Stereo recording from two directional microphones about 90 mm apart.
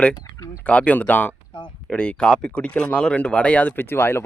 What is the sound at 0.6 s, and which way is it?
Speech, 15° left (ahead or behind).